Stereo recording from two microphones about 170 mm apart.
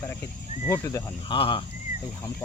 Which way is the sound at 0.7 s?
15° left (ahead or behind).